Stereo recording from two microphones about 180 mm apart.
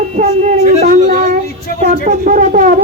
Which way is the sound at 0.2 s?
40° right (ahead or behind).